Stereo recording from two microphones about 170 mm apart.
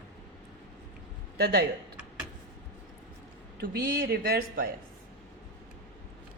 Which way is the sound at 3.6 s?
60° right (ahead or behind).